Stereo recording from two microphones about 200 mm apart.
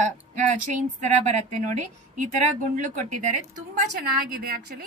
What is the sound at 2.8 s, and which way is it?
A woman's voice, 40° right (ahead or behind).